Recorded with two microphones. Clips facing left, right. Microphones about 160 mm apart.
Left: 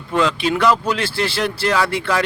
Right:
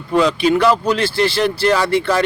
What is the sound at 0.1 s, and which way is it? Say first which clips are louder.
Speech: right 4 dB; centre (ahead or behind).